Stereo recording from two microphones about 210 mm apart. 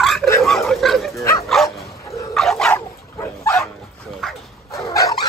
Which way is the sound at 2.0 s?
15° left (ahead or behind).